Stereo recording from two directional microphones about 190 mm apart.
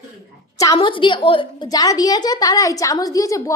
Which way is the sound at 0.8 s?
25° left (ahead or behind).